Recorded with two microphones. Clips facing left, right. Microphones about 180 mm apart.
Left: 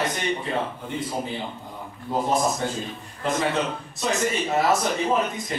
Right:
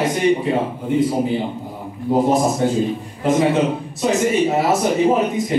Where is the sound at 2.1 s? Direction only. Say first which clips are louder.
Right 7 dB; 25° right (ahead or behind).